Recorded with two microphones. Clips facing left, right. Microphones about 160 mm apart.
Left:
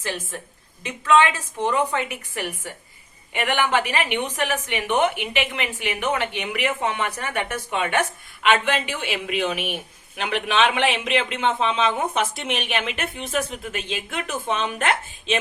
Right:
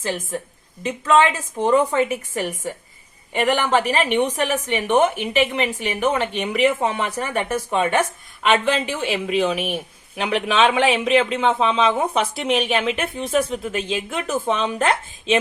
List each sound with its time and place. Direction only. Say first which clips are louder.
0.8 s a woman's voice: right 2 dB; 40° right (ahead or behind)
12.8 s speech: right 6 dB; centre (ahead or behind)
13.1 s a woman's voice: right 6 dB; 40° right (ahead or behind)